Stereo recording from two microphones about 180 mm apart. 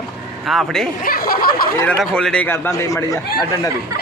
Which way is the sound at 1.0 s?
55° left (ahead or behind).